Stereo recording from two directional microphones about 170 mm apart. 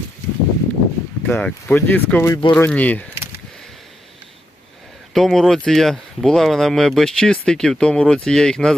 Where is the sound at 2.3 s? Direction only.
25° left (ahead or behind).